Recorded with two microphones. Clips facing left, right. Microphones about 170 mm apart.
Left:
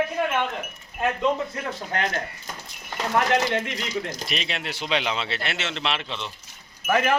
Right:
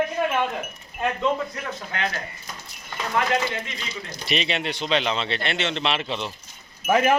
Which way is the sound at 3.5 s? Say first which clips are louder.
Left 6 dB; 65° left (ahead or behind).